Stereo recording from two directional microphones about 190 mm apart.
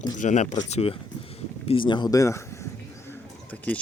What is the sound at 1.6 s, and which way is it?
Bird, 30° left (ahead or behind).